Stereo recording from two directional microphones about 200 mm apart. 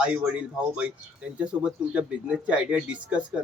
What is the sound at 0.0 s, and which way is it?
Speech, 5° right (ahead or behind).